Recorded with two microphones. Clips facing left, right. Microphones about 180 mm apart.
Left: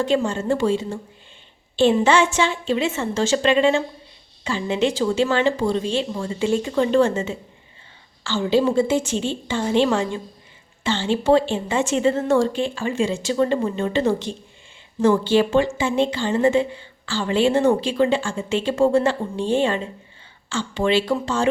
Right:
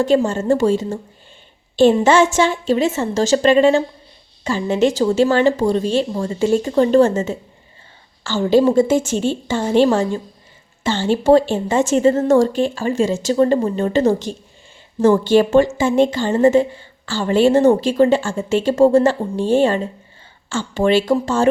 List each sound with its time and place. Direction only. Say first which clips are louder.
0.0 s speech: right 5 dB; 40° right (ahead or behind)